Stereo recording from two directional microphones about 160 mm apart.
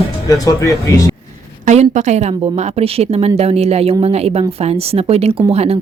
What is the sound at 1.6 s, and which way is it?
A woman's voice, 50° right (ahead or behind).